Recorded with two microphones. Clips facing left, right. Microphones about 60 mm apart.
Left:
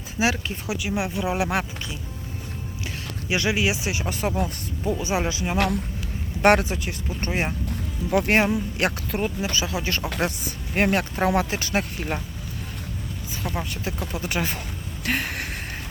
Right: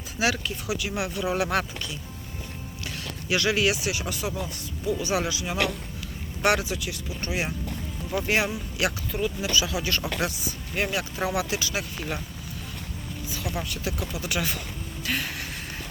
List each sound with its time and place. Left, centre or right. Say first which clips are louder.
0.2 s speech: left 2 dB; left
4.9 s speech: left 2 dB; left
8.1 s speech: left 5 dB; left
8.8 s speech: right 2 dB; left
10.2 s speech: left 3 dB; left
13.3 s speech: left 2 dB; left
15.0 s a sound: left 4 dB; left